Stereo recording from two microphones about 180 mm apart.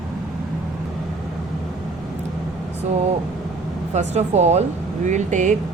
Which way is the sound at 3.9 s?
40° right (ahead or behind).